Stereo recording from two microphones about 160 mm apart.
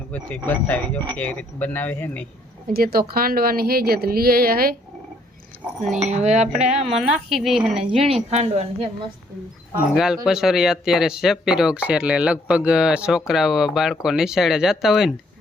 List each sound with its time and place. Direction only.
0.1 s speech: 10° left (ahead or behind)
2.7 s speech: 75° right (ahead or behind)
5.9 s cutlery: 45° right (ahead or behind)
7.0 s speech: centre (ahead or behind)
8.3 s a woman's voice: 40° right (ahead or behind)
9.9 s speech: 5° right (ahead or behind)